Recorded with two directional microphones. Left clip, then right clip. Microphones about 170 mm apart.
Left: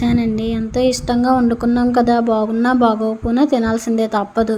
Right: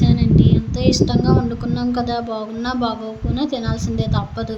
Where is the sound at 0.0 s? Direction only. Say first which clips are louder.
Even; 45° left (ahead or behind).